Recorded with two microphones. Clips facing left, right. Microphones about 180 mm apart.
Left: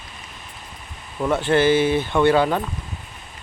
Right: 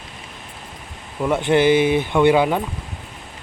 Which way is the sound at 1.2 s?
15° right (ahead or behind).